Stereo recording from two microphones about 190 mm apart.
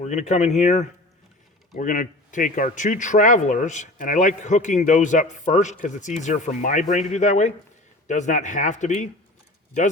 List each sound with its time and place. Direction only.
0.0 s speech: 40° left (ahead or behind)